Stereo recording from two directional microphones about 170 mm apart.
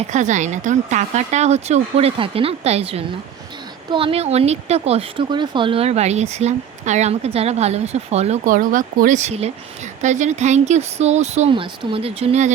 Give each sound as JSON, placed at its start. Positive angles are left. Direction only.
{"t": 0.1, "sound": "speech", "side_deg": -45}